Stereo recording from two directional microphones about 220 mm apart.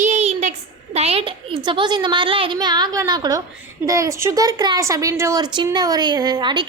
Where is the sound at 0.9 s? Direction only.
25° right (ahead or behind).